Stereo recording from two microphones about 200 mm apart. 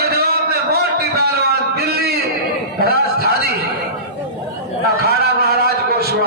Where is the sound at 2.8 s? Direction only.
50° right (ahead or behind).